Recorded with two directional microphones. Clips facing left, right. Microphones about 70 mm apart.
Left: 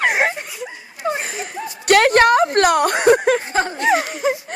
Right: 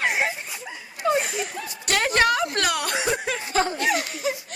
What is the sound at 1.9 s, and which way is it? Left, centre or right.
Speech, left.